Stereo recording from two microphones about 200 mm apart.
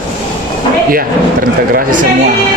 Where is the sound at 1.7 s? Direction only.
45° right (ahead or behind).